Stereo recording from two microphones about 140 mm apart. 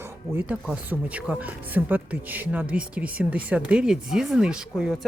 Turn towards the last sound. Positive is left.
turn(degrees=-5)  # may be behind; listen again after turning